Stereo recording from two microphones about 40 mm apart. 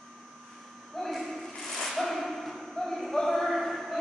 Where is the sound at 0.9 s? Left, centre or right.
Centre.